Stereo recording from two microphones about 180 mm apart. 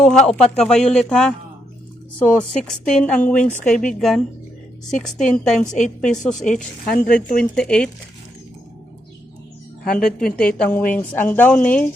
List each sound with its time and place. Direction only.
0.0 s speech: 5° left (ahead or behind)
6.9 s speech: 50° left (ahead or behind)
7.5 s speech: 5° left (ahead or behind)
9.8 s a woman's voice: 55° left (ahead or behind)
10.4 s speech: 5° left (ahead or behind)